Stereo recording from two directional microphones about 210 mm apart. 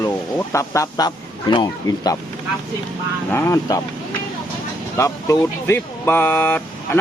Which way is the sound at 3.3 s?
15° left (ahead or behind).